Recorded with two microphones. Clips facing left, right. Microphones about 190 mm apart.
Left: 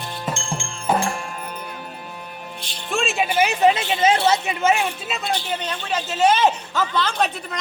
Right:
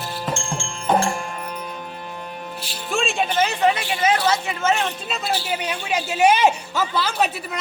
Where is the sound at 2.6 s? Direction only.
5° right (ahead or behind).